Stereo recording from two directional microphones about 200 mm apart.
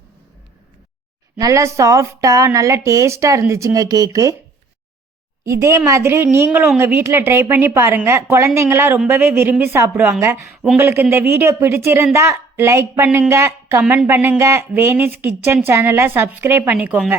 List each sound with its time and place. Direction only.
1.4 s a woman's voice: 15° right (ahead or behind)
5.5 s a woman's voice: 15° right (ahead or behind)